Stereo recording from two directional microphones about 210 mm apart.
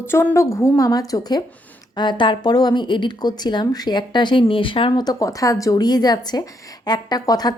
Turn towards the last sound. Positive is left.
turn(degrees=20)  # may be behind; listen again after turning